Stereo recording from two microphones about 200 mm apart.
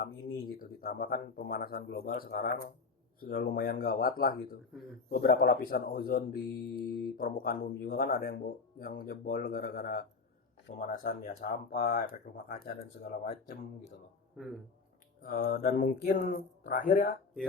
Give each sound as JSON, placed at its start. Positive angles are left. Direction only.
{"t": 0.0, "sound": "speech", "side_deg": 50}
{"t": 14.3, "sound": "speech", "side_deg": 0}
{"t": 15.2, "sound": "speech", "side_deg": 45}